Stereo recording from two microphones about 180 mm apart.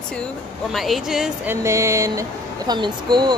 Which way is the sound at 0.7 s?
Centre (ahead or behind).